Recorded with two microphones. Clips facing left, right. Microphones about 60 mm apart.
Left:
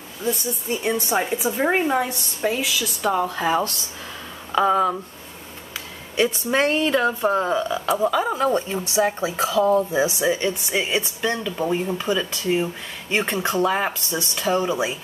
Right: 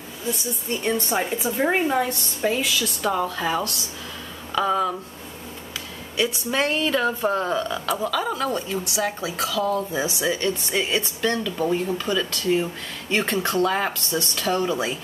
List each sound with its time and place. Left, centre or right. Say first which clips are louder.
0.7 s a woman's voice: left 1 dB; centre
6.1 s a woman's voice: left 3 dB; left
6.6 s a woman's voice: left 2 dB; centre